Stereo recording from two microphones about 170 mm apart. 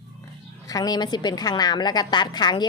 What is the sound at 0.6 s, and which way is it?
A woman's voice, 20° left (ahead or behind).